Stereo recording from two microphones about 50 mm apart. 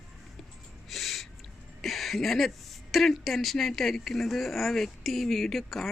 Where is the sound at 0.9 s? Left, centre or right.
Centre.